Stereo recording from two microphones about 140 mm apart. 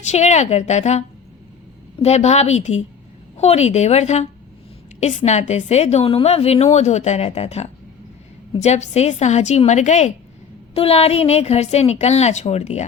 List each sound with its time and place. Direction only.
0.1 s a woman's voice: 55° left (ahead or behind)
10.8 s a woman's voice: 45° left (ahead or behind)